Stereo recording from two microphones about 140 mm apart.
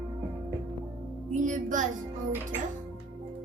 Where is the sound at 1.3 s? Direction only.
65° right (ahead or behind).